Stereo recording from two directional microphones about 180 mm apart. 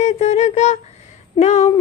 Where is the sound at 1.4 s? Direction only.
40° left (ahead or behind).